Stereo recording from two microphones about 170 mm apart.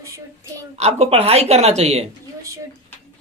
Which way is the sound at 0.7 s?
40° right (ahead or behind).